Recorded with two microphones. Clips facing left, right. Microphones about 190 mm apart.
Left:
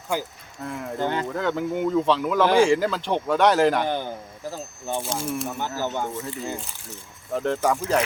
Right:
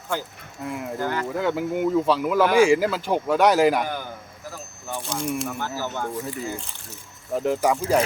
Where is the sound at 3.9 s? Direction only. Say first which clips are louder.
Left 4 dB; 25° left (ahead or behind).